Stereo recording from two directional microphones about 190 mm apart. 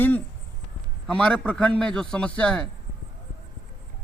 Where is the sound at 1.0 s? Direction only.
5° left (ahead or behind).